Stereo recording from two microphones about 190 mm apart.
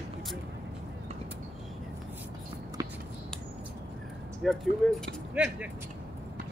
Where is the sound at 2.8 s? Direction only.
20° right (ahead or behind).